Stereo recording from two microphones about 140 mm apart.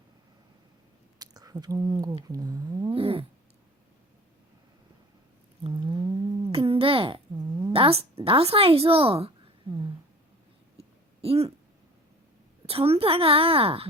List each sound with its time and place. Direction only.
1.2 s speech: 25° right (ahead or behind)
3.0 s cat: 45° right (ahead or behind)
5.6 s a sound: 35° right (ahead or behind)
6.5 s babbling: 40° right (ahead or behind)
9.7 s speech: 45° right (ahead or behind)
11.2 s speech: 45° right (ahead or behind)
12.6 s a woman's voice: 45° right (ahead or behind)